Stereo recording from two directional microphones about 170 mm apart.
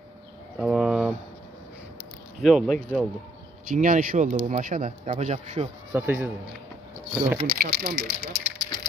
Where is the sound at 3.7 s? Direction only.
50° right (ahead or behind).